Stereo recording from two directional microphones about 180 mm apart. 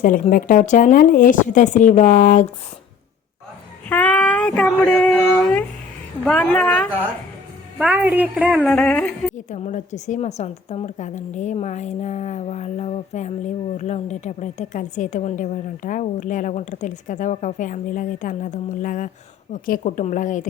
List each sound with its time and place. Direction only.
0.0 s a woman's voice: 50° left (ahead or behind)
3.8 s a sound: 10° left (ahead or behind)
6.2 s a woman's voice: 5° left (ahead or behind)
7.8 s a woman's voice: 10° right (ahead or behind)
8.6 s a woman's voice: 5° left (ahead or behind)
9.5 s a woman's voice: 40° left (ahead or behind)